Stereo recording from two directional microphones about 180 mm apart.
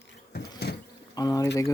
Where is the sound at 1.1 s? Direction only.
20° left (ahead or behind).